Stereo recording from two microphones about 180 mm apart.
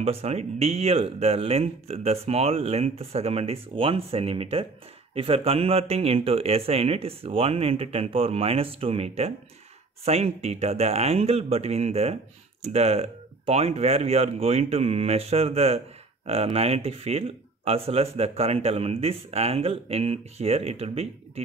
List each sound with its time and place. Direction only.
0.0 s speech: 35° right (ahead or behind)